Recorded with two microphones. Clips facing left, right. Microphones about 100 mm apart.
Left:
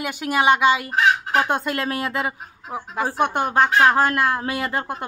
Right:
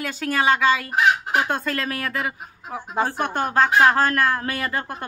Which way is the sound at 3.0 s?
10° left (ahead or behind).